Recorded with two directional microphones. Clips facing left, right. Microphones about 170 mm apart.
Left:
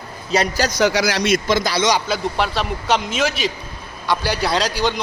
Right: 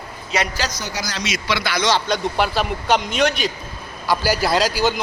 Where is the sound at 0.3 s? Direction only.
40° left (ahead or behind).